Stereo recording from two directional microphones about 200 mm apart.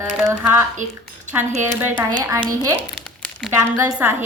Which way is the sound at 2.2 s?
20° right (ahead or behind).